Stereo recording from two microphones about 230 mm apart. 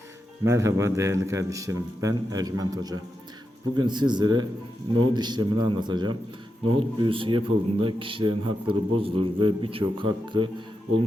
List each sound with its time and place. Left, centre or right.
0.4 s a man's voice: centre